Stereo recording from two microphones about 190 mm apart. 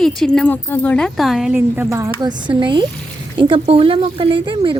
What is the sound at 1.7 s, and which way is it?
A woman's voice, 15° right (ahead or behind).